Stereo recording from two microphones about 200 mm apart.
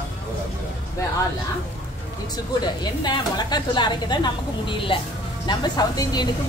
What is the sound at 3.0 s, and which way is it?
A woman's voice, 20° left (ahead or behind).